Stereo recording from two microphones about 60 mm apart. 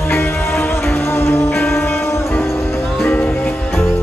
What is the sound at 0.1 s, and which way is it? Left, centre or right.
Music, left.